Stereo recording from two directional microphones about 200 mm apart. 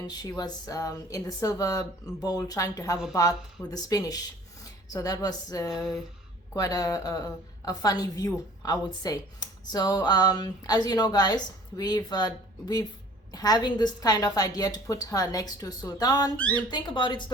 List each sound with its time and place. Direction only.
0.1 s speech: 20° left (ahead or behind)
5.7 s a sound: centre (ahead or behind)
6.5 s a woman's voice: 20° left (ahead or behind)